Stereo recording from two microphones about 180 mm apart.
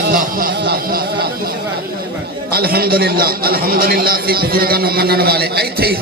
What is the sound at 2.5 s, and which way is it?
A man's voice, 60° right (ahead or behind).